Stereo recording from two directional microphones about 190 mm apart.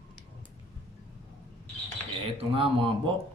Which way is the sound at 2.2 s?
30° right (ahead or behind).